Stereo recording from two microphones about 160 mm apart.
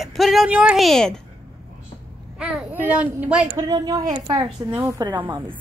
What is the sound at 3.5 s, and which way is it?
A woman's voice, 20° right (ahead or behind).